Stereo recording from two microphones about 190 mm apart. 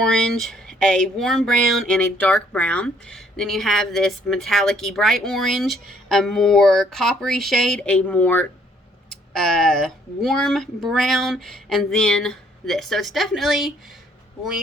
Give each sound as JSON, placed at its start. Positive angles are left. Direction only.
{"t": 0.0, "sound": "speech", "side_deg": 5}